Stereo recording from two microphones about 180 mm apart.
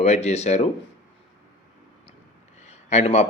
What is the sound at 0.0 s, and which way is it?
Speech, 35° left (ahead or behind).